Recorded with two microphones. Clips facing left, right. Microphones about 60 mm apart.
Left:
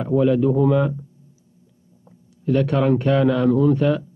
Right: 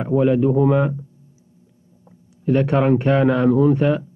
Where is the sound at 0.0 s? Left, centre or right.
Right.